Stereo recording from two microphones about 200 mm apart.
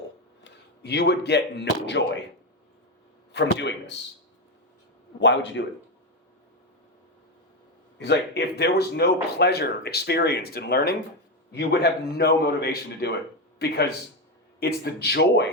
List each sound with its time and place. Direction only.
0.4 s speech: 55° left (ahead or behind)
3.3 s speech: 60° left (ahead or behind)
5.2 s speech: 60° left (ahead or behind)
7.9 s a man's voice: 60° left (ahead or behind)
14.6 s a man's voice: 55° left (ahead or behind)